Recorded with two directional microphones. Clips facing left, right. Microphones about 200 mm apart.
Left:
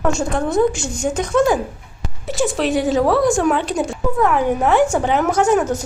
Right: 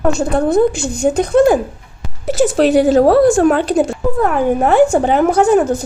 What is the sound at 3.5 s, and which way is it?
Speech, 40° right (ahead or behind).